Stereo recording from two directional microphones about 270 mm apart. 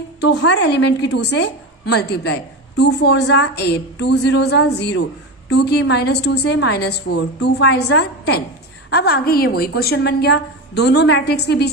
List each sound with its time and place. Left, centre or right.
0.2 s a woman's voice: left